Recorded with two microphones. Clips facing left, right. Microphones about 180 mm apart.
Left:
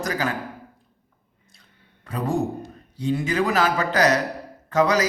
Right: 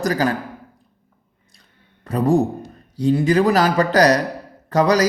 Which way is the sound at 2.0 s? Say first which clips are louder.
Right 7 dB; 40° right (ahead or behind).